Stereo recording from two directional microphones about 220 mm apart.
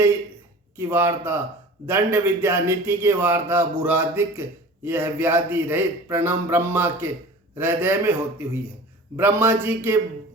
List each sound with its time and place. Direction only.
0.8 s a man's voice: 10° right (ahead or behind)